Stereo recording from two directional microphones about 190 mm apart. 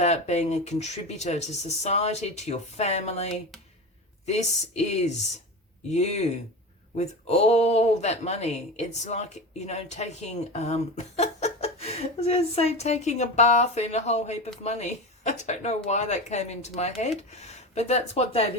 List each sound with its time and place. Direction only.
0.0 s speech: 35° left (ahead or behind)